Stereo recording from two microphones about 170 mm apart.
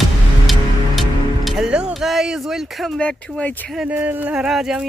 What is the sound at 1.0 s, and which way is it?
Speech, centre (ahead or behind).